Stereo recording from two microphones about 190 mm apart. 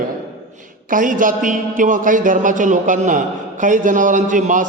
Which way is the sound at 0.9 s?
45° right (ahead or behind).